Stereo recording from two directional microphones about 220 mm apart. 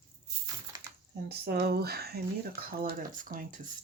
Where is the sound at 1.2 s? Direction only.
45° right (ahead or behind).